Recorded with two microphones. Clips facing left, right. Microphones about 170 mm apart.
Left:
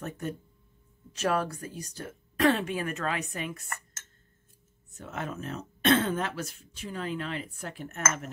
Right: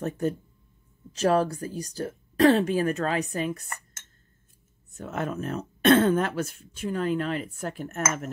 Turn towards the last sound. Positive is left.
turn(degrees=-45)  # may be behind; listen again after turning